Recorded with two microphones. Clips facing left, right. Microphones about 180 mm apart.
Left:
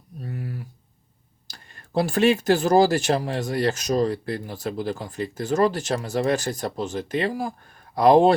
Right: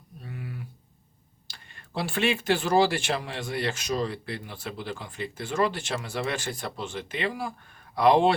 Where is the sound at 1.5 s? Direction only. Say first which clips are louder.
Left 4 dB; 40° left (ahead or behind).